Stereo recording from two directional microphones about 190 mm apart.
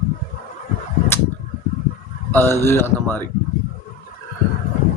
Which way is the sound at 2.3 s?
10° left (ahead or behind).